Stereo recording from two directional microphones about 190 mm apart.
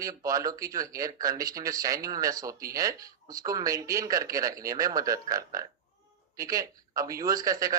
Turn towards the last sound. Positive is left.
turn(degrees=-20)  # may be behind; listen again after turning